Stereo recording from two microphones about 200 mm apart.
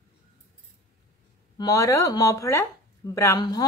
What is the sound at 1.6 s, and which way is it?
A woman's voice, 15° left (ahead or behind).